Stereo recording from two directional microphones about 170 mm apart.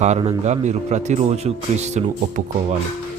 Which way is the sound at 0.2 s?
35° right (ahead or behind).